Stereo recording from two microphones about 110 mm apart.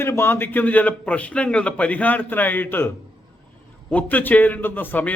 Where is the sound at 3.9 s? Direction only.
15° left (ahead or behind).